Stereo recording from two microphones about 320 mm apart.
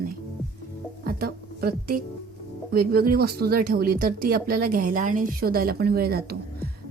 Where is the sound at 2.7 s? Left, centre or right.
Right.